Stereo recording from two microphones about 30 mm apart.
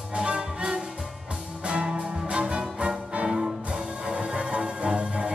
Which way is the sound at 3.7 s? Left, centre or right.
Right.